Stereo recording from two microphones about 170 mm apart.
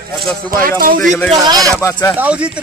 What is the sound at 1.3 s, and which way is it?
Speech, 20° right (ahead or behind).